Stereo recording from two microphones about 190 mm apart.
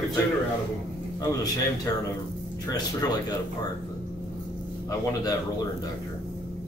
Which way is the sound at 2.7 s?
20° left (ahead or behind).